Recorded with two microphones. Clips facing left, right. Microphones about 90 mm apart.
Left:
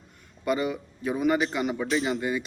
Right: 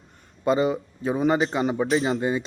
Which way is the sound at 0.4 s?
30° right (ahead or behind).